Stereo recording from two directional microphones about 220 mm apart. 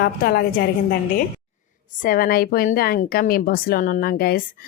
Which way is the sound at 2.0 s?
40° left (ahead or behind).